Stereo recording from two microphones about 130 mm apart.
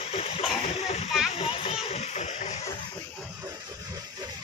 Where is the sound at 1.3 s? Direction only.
50° left (ahead or behind).